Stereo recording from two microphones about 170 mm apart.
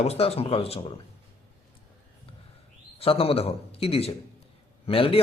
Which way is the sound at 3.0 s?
35° left (ahead or behind).